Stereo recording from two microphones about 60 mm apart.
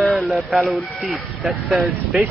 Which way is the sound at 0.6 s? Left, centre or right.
Centre.